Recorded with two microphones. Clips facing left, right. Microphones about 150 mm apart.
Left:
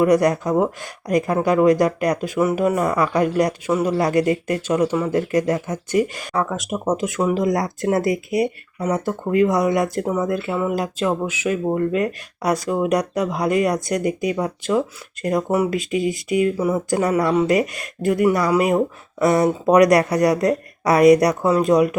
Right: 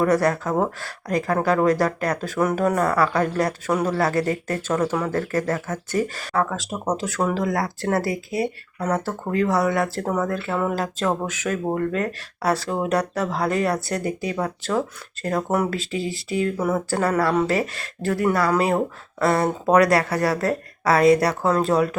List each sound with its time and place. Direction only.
0.0 s speech: 15° left (ahead or behind)
15.8 s speech: 35° right (ahead or behind)
16.4 s speech: 10° left (ahead or behind)